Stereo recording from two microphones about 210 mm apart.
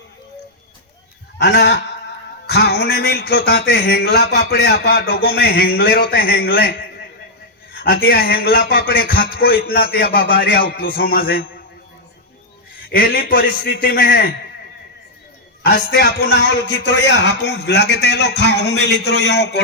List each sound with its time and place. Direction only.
1.4 s speech: 55° left (ahead or behind)
12.9 s speech: 45° left (ahead or behind)
15.6 s speech: 50° left (ahead or behind)